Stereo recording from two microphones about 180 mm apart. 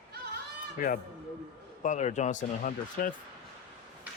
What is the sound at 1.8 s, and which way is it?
Speech, 40° left (ahead or behind).